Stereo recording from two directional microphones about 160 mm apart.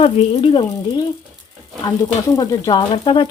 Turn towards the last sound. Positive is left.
turn(degrees=30)  # may be behind; listen again after turning